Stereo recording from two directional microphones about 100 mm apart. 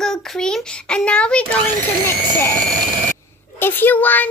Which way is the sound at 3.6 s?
20° left (ahead or behind).